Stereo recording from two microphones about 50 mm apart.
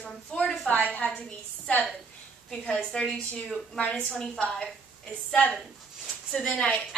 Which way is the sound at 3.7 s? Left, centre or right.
Left.